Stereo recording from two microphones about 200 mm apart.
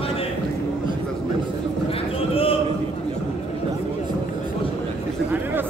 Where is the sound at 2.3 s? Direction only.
30° left (ahead or behind).